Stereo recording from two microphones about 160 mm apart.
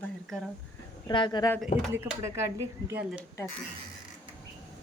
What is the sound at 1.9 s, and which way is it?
Speech, 15° right (ahead or behind).